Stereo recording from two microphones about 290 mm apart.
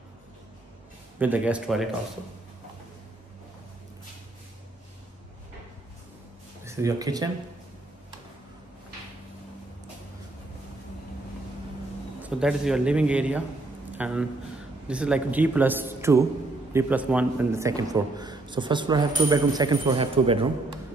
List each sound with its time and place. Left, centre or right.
1.2 s speech: centre
6.6 s speech: centre
12.2 s a man's voice: centre